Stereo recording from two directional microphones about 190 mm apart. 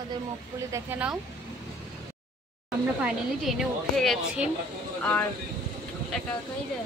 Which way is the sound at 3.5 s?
Centre (ahead or behind).